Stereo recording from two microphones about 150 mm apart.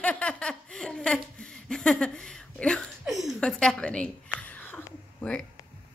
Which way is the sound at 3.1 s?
Centre (ahead or behind).